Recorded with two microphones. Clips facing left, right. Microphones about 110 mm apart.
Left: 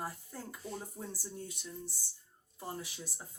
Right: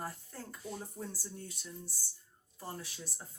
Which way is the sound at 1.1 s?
15° left (ahead or behind).